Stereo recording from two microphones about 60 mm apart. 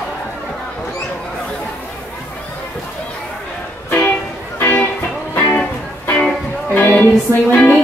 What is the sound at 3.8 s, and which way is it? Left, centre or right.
Music, left.